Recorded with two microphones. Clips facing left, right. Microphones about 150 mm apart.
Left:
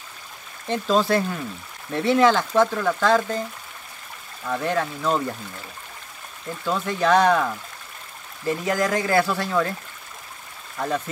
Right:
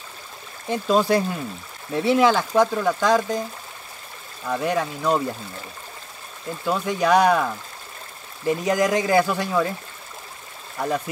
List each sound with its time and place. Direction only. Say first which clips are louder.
0.7 s speech: right 1 dB; 10° right (ahead or behind)
4.5 s speech: right 1 dB; 10° right (ahead or behind)
6.6 s speech: right 1 dB; 10° right (ahead or behind)
8.5 s speech: right 2 dB; 20° right (ahead or behind)